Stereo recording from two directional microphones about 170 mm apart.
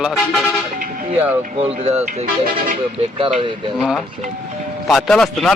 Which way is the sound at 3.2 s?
35° right (ahead or behind).